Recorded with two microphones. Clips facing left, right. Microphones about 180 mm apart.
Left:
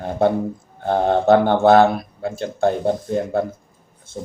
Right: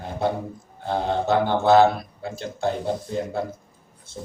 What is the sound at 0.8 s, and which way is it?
Speech, 55° left (ahead or behind).